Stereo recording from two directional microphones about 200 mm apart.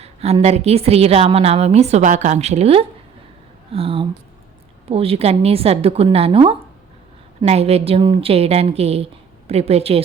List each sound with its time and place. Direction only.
0.0 s a woman's voice: 30° right (ahead or behind)